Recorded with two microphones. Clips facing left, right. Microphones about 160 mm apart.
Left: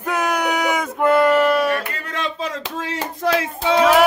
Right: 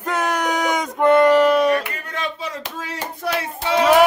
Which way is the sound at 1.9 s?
90° left.